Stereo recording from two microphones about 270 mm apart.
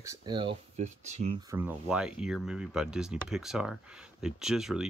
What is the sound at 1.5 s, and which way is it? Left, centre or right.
Speech, centre.